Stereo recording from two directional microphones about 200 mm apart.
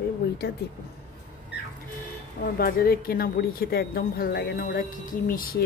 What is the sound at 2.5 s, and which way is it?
Speech, 50° left (ahead or behind).